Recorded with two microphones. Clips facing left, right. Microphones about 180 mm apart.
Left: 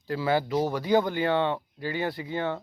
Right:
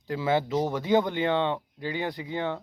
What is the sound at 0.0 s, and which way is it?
Speech, 20° right (ahead or behind).